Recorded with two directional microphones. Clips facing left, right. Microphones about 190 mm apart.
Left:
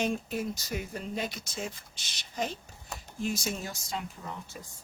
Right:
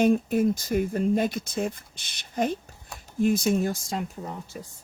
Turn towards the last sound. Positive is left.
turn(degrees=-40)  # may be behind; listen again after turning